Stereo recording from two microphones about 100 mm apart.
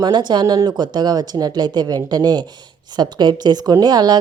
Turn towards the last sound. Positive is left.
turn(degrees=-45)  # may be behind; listen again after turning